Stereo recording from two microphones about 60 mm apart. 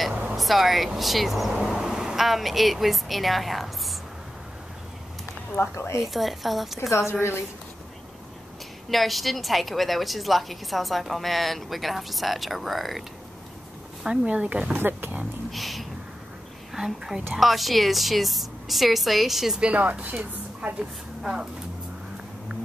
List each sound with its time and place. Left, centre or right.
0.4 s speech: centre
5.6 s speech: left
6.0 s a woman's voice: centre
6.9 s speech: left
8.9 s a woman's voice: centre
14.0 s speech: centre
14.7 s speech: right
15.5 s a sound: centre
16.7 s a woman's voice: centre
19.6 s speech: right
20.8 s a woman's voice: centre